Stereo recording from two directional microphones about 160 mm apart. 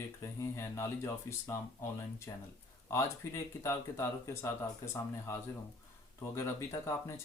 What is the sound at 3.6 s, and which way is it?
Speech, 20° left (ahead or behind).